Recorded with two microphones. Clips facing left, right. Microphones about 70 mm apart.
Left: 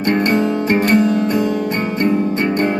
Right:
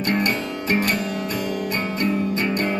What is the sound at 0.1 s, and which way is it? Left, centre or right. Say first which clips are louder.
Music: left 9 dB; left.